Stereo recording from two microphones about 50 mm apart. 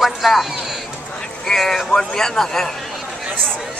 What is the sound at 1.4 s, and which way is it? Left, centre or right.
Speech, centre.